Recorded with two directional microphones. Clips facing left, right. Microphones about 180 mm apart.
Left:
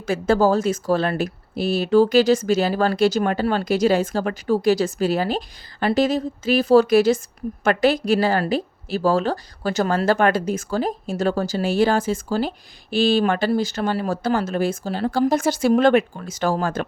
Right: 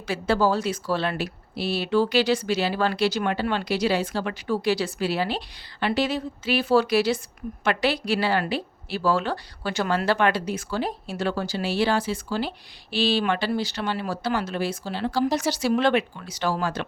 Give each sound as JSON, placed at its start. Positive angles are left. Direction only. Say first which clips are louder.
{"t": 0.0, "sound": "a woman's voice", "louder": "left 5 dB", "side_deg": 45}